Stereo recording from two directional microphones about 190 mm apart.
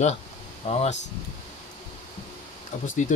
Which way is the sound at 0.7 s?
35° left (ahead or behind).